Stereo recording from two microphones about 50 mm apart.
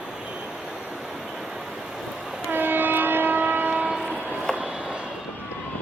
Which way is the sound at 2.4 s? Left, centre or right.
Right.